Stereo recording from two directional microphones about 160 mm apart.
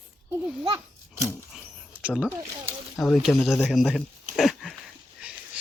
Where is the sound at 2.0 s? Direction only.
5° right (ahead or behind).